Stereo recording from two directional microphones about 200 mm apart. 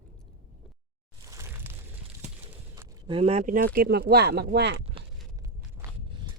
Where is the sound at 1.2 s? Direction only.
15° right (ahead or behind).